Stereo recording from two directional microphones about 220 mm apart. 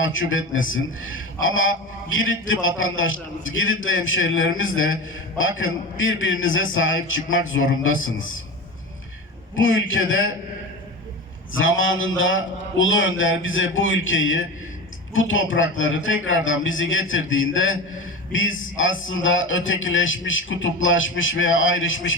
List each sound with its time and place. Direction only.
0.0 s a man's voice: 60° left (ahead or behind)
9.6 s a man's voice: 65° left (ahead or behind)
11.5 s a man's voice: 65° left (ahead or behind)